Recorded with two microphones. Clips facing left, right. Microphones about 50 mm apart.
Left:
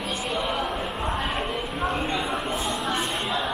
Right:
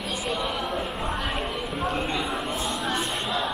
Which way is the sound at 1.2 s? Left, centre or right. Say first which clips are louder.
Left 1 dB; left.